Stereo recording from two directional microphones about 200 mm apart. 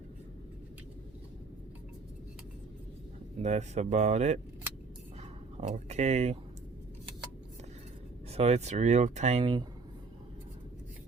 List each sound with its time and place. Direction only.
3.4 s speech: 35° right (ahead or behind)
5.5 s speech: 35° right (ahead or behind)
8.3 s speech: 30° right (ahead or behind)